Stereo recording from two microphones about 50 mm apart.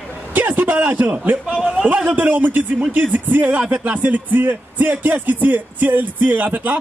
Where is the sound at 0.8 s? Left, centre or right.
Right.